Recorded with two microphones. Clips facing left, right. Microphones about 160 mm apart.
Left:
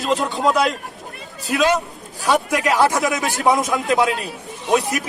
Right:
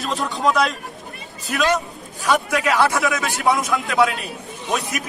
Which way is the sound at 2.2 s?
20° left (ahead or behind).